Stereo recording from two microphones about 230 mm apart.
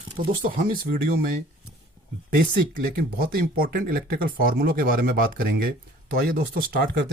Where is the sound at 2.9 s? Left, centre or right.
Right.